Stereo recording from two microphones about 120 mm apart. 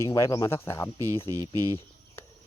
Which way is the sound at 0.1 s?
30° left (ahead or behind).